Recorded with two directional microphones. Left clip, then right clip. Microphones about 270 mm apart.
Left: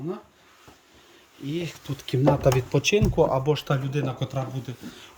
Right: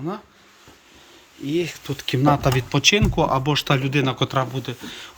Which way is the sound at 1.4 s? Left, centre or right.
Centre.